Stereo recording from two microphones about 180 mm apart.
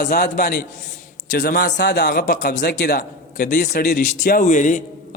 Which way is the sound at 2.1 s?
55° left (ahead or behind).